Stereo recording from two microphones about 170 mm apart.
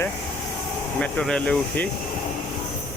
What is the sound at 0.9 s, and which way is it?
Speech, 5° left (ahead or behind).